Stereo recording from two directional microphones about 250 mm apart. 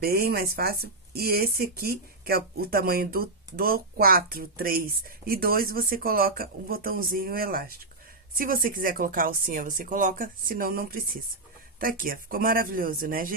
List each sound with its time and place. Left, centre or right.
0.0 s speech: right